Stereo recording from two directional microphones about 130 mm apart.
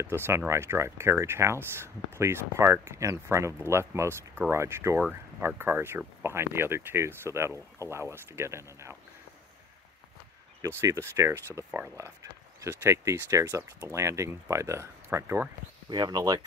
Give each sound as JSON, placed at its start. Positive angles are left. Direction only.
{"t": 0.0, "sound": "speech", "side_deg": -20}
{"t": 10.8, "sound": "speech", "side_deg": -20}
{"t": 15.9, "sound": "speech", "side_deg": -35}